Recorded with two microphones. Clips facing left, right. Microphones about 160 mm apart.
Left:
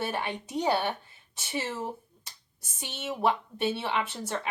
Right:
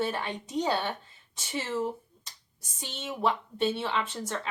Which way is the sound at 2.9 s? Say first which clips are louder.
Left 2 dB; 10° left (ahead or behind).